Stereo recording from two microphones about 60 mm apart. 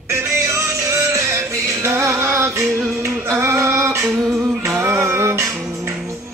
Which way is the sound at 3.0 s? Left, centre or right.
Right.